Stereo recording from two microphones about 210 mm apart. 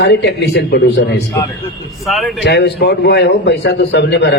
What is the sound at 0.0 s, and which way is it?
A man's voice, 55° left (ahead or behind).